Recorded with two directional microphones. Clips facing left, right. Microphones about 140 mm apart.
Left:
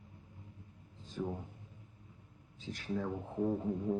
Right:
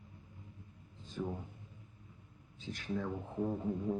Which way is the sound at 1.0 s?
35° left (ahead or behind).